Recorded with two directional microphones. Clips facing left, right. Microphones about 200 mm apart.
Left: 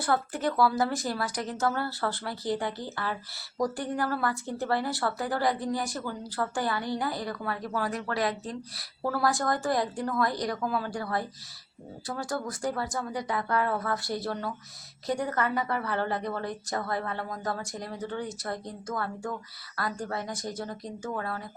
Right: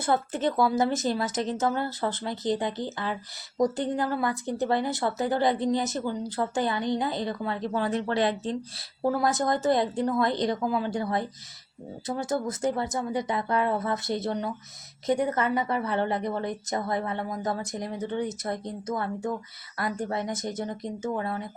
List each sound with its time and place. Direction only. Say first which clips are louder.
0.0 s speech: right 2 dB; 20° right (ahead or behind)